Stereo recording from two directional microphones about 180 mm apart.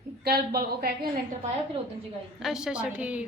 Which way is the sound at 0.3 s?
60° right (ahead or behind).